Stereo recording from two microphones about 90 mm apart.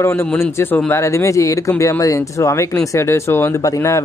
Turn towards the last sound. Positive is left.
turn(degrees=35)  # may be behind; listen again after turning